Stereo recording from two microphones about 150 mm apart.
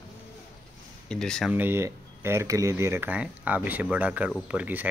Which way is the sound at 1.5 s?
15° right (ahead or behind).